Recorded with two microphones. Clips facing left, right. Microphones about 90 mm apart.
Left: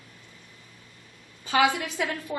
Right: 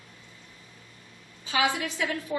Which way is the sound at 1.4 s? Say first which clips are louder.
Left 4 dB; 50° left (ahead or behind).